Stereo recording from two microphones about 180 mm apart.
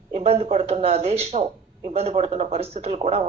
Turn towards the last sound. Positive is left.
turn(degrees=-35)  # may be behind; listen again after turning